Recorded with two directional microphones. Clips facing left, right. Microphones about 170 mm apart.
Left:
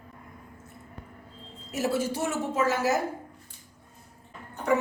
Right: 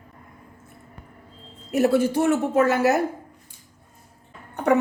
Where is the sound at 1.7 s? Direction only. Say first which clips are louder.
Right 9 dB; 60° right (ahead or behind).